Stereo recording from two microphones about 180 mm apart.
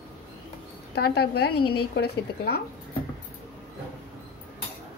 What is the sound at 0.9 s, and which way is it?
A woman's voice, 60° left (ahead or behind).